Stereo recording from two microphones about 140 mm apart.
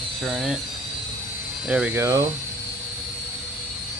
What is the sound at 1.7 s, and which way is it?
Speech, 10° right (ahead or behind).